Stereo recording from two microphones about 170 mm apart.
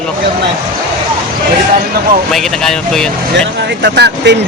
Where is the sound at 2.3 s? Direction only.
Centre (ahead or behind).